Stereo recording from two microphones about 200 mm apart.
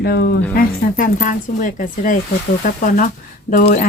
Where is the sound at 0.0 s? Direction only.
50° left (ahead or behind).